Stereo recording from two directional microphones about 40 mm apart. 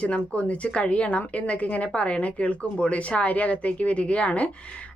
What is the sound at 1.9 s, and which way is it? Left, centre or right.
Speech, left.